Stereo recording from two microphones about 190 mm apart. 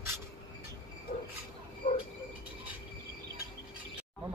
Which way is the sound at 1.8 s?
40° left (ahead or behind).